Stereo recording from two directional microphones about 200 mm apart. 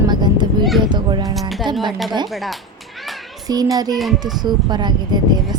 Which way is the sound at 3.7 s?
20° right (ahead or behind).